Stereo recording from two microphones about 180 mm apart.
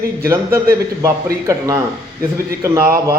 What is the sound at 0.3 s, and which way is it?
A man's voice, 15° right (ahead or behind).